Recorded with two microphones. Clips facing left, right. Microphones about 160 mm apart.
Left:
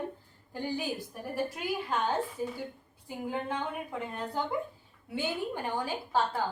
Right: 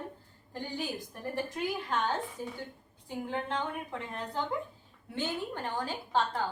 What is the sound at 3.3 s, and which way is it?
Speech, 5° left (ahead or behind).